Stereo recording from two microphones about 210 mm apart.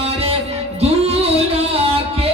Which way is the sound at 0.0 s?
30° right (ahead or behind).